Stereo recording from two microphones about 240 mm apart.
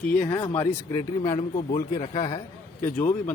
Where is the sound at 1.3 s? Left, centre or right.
Left.